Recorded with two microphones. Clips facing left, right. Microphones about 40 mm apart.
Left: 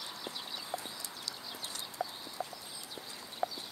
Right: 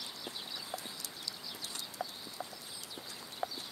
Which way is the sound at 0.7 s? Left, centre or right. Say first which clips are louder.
Left 4 dB; centre.